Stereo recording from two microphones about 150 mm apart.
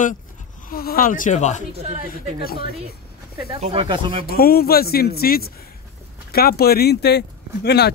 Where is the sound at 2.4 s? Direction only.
90° left.